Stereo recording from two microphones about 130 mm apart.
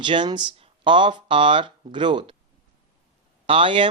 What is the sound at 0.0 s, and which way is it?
Speech, 35° right (ahead or behind).